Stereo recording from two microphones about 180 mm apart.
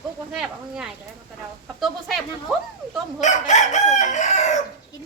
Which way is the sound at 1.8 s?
Centre (ahead or behind).